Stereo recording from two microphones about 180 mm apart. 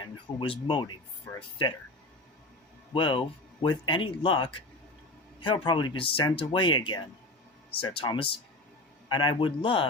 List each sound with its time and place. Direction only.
0.0 s speech: 30° left (ahead or behind)
2.9 s speech: 25° left (ahead or behind)